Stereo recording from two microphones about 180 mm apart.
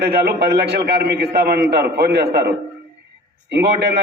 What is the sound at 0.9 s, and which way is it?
A man's voice, 65° right (ahead or behind).